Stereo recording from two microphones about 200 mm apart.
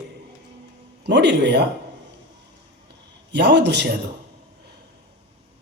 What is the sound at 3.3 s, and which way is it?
Speech, 60° right (ahead or behind).